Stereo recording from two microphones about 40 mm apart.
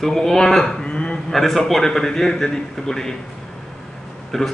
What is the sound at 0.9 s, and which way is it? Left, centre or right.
Speech, left.